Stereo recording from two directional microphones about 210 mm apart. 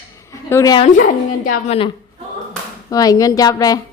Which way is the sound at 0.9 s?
40° left (ahead or behind).